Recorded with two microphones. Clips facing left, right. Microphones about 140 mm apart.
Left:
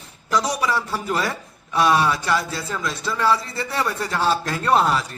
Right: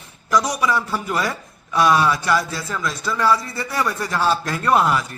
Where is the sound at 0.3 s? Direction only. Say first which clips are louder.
Right 2 dB; 30° left (ahead or behind).